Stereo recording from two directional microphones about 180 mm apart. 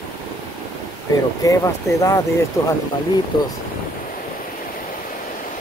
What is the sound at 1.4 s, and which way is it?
Speech, 20° left (ahead or behind).